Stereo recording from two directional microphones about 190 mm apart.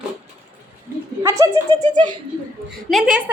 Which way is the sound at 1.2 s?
15° right (ahead or behind).